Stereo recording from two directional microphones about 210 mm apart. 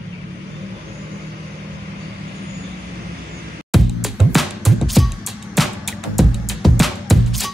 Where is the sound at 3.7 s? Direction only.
Centre (ahead or behind).